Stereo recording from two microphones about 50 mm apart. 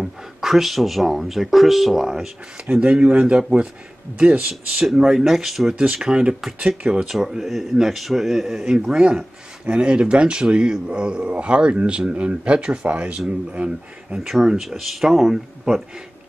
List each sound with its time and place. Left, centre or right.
0.0 s speech: centre
2.8 s a man's voice: right
4.8 s speech: centre
5.8 s a man's voice: centre
7.1 s a man's voice: centre; by 13.7 s right
14.1 s speech: centre